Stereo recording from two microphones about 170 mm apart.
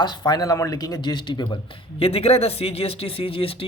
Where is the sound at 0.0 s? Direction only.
25° left (ahead or behind).